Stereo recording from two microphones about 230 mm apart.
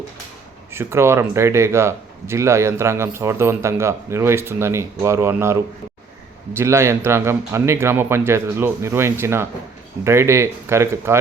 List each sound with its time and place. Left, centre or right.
0.7 s speech: centre